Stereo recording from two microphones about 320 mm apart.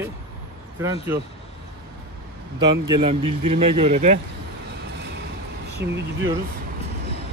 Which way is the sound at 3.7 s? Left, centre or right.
Centre.